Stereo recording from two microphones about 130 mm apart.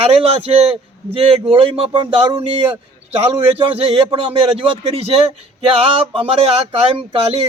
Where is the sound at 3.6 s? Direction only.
50° right (ahead or behind).